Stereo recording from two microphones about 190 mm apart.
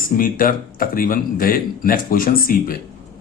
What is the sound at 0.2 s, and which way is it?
Speech, 50° left (ahead or behind).